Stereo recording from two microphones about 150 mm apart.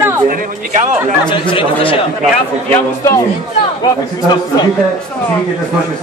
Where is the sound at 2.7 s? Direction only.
20° left (ahead or behind).